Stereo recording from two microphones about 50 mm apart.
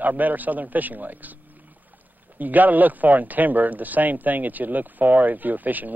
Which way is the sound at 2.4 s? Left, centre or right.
Right.